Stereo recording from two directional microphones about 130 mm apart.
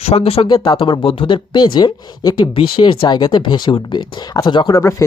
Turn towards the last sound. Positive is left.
turn(degrees=25)  # may be behind; listen again after turning